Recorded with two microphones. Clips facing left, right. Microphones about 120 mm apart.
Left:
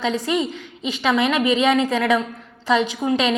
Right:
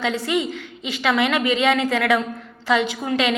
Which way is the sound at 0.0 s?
20° left (ahead or behind).